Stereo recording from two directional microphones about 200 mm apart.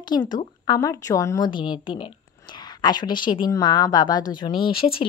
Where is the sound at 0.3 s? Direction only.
20° left (ahead or behind).